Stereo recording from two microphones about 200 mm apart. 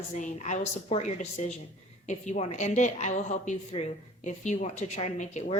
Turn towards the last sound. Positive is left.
turn(degrees=35)  # may be behind; listen again after turning